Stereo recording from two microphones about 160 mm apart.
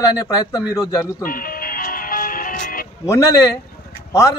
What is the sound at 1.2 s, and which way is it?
Music, 60° left (ahead or behind).